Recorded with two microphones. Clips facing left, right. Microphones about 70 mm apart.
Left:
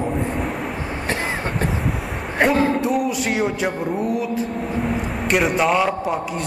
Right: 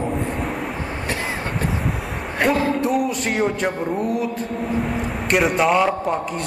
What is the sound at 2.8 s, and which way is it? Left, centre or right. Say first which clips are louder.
Speech: even; centre.